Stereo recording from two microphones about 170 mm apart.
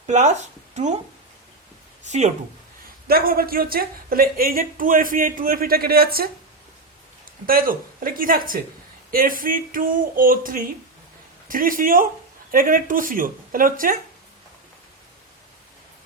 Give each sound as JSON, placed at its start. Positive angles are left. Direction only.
{"t": 0.1, "sound": "speech", "side_deg": -45}
{"t": 2.0, "sound": "speech", "side_deg": -45}
{"t": 3.1, "sound": "speech", "side_deg": -60}
{"t": 7.4, "sound": "speech", "side_deg": -55}